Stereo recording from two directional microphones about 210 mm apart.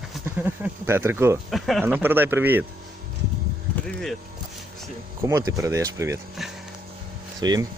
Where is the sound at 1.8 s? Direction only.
10° right (ahead or behind).